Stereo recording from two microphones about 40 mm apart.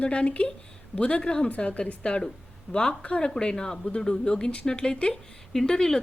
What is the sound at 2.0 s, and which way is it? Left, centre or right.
Speech, left.